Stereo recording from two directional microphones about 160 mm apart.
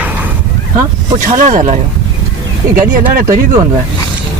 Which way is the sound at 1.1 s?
50° right (ahead or behind).